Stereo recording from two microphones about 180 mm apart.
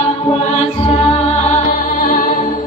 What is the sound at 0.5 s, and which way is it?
Music, 35° left (ahead or behind).